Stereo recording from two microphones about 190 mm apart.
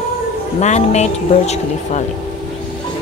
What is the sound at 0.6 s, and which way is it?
Speech, 35° left (ahead or behind).